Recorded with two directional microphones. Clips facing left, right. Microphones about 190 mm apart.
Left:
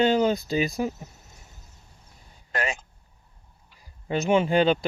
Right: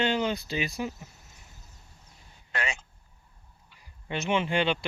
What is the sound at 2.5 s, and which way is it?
Speech, 40° left (ahead or behind).